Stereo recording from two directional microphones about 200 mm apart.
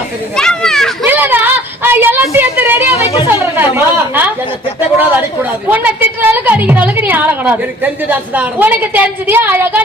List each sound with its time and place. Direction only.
0.3 s children playing: 5° left (ahead or behind)
1.0 s a sound: 10° right (ahead or behind)
2.9 s a woman's voice: 30° left (ahead or behind)
3.2 s a woman's voice: 10° right (ahead or behind)